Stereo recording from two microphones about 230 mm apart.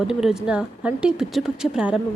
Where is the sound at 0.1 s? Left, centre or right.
Centre.